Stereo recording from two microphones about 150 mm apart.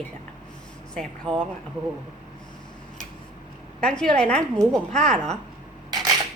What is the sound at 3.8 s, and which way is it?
A woman's voice, 5° left (ahead or behind).